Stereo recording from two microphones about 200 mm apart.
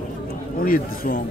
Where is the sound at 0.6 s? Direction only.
45° left (ahead or behind).